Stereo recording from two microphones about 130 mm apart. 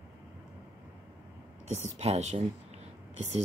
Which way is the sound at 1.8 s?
55° right (ahead or behind).